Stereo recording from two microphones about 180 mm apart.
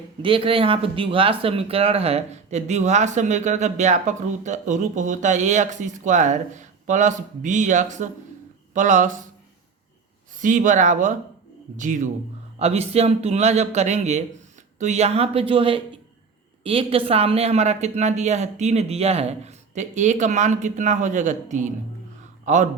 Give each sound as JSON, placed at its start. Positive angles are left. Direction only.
{"t": 0.2, "sound": "speech", "side_deg": -30}
{"t": 10.3, "sound": "speech", "side_deg": -45}